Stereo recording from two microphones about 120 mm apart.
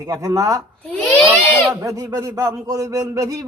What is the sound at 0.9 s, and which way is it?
Speech, 10° left (ahead or behind).